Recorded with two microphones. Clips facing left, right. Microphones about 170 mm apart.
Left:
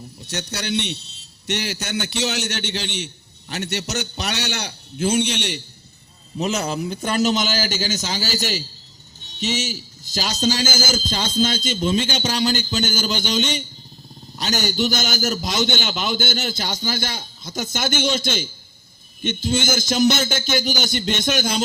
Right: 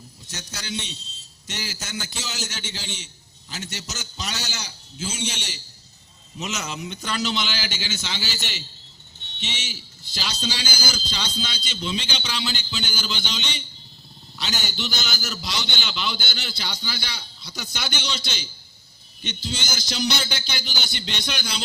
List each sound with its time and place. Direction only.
0.3 s a man's voice: 70° left (ahead or behind)
6.3 s speech: 35° left (ahead or behind)
7.0 s a man's voice: 50° left (ahead or behind)